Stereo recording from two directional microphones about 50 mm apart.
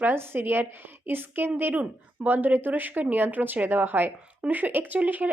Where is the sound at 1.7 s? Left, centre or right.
Right.